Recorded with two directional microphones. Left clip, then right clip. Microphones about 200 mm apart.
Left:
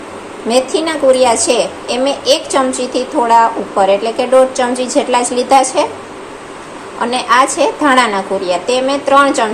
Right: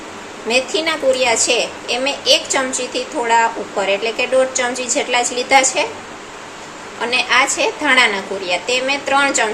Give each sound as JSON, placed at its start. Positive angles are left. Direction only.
{"t": 0.4, "sound": "a woman's voice", "side_deg": 15}
{"t": 7.0, "sound": "a woman's voice", "side_deg": 15}